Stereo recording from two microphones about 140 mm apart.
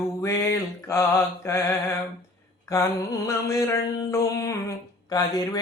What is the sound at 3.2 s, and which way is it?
Mantra, 20° left (ahead or behind).